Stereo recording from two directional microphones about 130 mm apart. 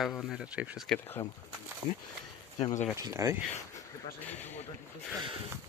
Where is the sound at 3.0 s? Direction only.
25° right (ahead or behind).